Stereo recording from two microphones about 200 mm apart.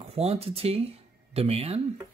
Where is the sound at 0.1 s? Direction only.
30° right (ahead or behind).